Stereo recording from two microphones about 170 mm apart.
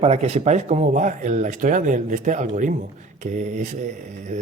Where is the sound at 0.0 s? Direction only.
40° right (ahead or behind).